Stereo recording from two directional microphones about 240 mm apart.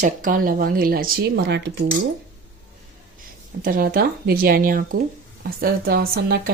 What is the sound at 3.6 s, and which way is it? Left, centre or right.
Speech, right.